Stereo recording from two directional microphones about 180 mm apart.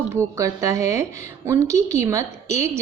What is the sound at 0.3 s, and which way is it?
A woman's voice, 15° right (ahead or behind).